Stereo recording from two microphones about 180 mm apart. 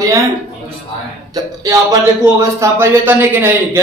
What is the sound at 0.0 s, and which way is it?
Speech, 15° right (ahead or behind).